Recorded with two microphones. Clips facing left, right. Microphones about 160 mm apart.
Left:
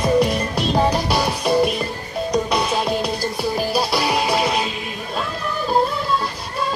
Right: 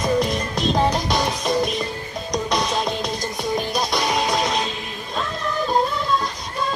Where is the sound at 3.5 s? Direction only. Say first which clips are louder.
Left 2 dB; 5° left (ahead or behind).